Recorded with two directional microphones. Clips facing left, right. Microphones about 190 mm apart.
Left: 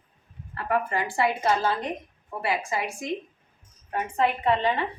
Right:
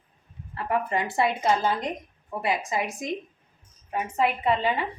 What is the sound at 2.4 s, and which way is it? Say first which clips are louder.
Speech: right 1 dB; 20° right (ahead or behind).